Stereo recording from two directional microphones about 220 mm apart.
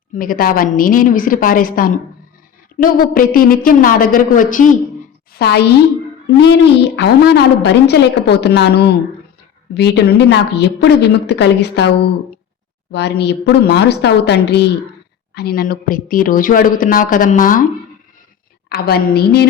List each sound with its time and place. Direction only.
0.2 s a woman's voice: 40° left (ahead or behind)
5.3 s a woman's voice: 45° left (ahead or behind)
12.9 s a woman's voice: 50° left (ahead or behind)
18.7 s a woman's voice: 45° left (ahead or behind)